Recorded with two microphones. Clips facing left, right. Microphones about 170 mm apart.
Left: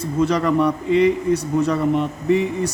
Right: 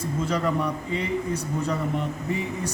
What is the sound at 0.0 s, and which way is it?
A man's voice, 75° left (ahead or behind).